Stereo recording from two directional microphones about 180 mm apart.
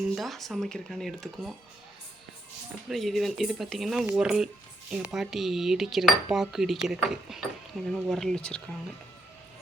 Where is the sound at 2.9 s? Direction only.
Centre (ahead or behind).